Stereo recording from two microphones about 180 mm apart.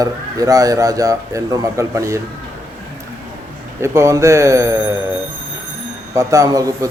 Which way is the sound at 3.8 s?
15° right (ahead or behind).